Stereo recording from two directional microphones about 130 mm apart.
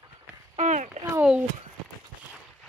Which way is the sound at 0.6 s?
75° right (ahead or behind).